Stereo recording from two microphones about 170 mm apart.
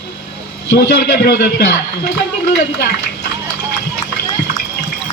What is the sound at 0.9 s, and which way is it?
A man's voice, 65° left (ahead or behind).